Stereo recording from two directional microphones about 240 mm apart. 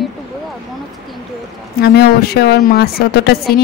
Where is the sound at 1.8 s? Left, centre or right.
Left.